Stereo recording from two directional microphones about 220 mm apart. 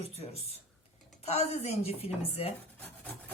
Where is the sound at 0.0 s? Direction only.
30° left (ahead or behind).